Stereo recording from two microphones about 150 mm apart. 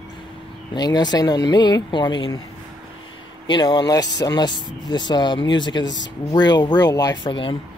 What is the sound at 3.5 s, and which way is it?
Speech, 30° left (ahead or behind).